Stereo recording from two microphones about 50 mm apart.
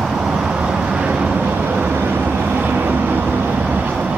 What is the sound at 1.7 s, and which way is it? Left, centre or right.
Vehicle, right.